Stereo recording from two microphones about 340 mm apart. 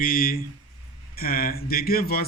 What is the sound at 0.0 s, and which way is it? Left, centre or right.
Speech, left.